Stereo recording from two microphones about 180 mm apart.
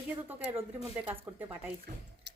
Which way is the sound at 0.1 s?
10° right (ahead or behind).